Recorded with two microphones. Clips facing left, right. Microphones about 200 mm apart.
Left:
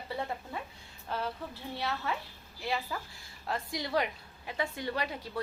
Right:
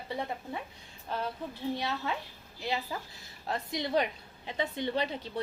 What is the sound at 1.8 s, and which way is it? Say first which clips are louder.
A woman's voice: right 1 dB; 20° right (ahead or behind).